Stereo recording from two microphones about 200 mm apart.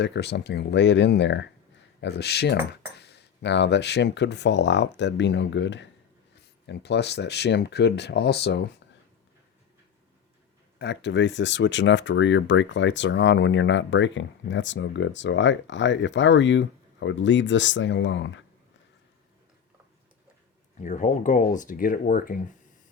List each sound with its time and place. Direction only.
0.0 s speech: 60° left (ahead or behind)
10.8 s speech: 60° left (ahead or behind)
20.8 s speech: 40° left (ahead or behind)